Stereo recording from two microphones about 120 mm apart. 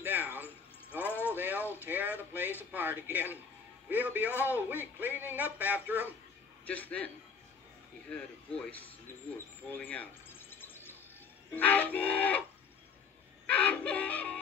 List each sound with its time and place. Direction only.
0.0 s a sound: 15° right (ahead or behind)
2.3 s speech: 15° right (ahead or behind)
6.6 s music: 10° left (ahead or behind)
8.1 s music: 10° left (ahead or behind)
10.5 s bird: 15° left (ahead or behind)
11.5 s music: 15° left (ahead or behind)
13.5 s music: 15° left (ahead or behind)